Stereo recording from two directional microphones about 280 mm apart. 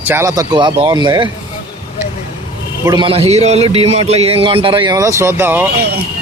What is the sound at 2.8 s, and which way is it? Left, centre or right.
A man's voice, centre.